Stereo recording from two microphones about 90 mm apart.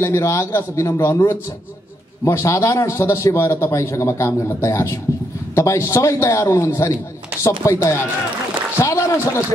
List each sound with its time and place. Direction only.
0.0 s a man's voice: 35° left (ahead or behind)